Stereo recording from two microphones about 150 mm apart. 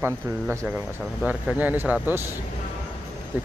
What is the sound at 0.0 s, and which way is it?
Speech, 15° right (ahead or behind).